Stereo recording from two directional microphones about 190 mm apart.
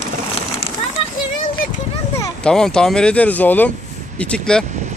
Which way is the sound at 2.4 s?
5° left (ahead or behind).